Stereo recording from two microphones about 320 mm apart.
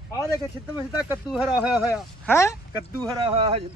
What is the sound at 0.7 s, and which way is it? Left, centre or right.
Speech, centre.